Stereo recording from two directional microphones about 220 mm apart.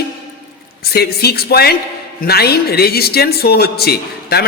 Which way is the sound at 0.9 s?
45° left (ahead or behind).